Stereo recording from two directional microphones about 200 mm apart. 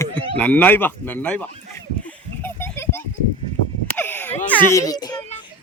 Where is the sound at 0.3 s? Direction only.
10° left (ahead or behind).